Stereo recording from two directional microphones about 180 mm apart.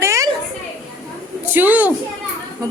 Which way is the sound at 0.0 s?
15° right (ahead or behind).